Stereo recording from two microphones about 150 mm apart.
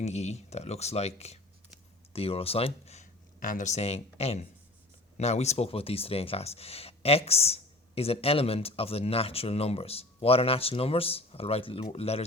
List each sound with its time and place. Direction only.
0.0 s speech: 45° left (ahead or behind)
3.4 s speech: 60° left (ahead or behind)